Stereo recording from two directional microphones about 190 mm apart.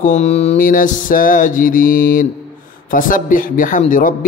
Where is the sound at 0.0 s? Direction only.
40° left (ahead or behind).